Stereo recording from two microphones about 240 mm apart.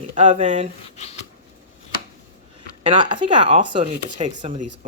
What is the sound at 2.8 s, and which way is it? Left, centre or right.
Speech, centre.